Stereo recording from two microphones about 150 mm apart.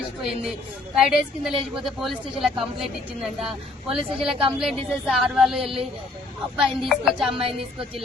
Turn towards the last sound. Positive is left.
turn(degrees=0)  # may be behind; listen again after turning